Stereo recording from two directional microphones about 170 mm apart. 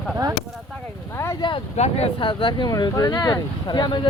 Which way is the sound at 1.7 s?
40° left (ahead or behind).